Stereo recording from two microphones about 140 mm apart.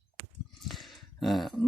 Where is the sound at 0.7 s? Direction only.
Centre (ahead or behind).